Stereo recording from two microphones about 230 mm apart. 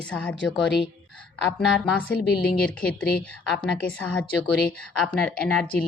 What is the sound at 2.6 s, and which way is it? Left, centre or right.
Speech, centre.